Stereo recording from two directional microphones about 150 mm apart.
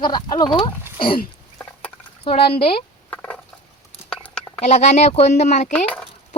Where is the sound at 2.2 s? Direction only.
35° left (ahead or behind).